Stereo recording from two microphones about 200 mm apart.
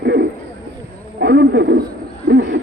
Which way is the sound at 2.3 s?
65° right (ahead or behind).